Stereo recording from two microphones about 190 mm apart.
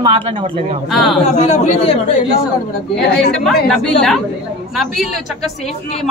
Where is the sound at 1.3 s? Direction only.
35° left (ahead or behind).